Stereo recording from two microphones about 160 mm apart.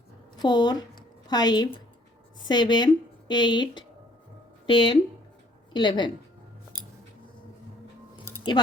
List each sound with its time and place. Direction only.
0.4 s a woman's voice: 25° left (ahead or behind)